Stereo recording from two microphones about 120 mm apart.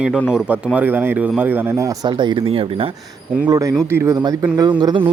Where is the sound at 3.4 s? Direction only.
30° right (ahead or behind).